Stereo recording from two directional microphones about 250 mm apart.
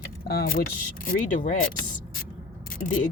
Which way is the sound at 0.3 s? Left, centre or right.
Left.